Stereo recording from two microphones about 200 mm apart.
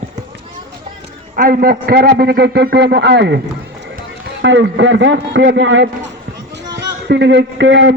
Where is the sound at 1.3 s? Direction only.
45° right (ahead or behind).